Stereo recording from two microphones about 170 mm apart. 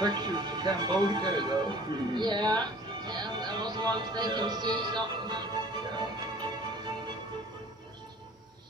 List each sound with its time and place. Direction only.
0.0 s speech: 25° right (ahead or behind)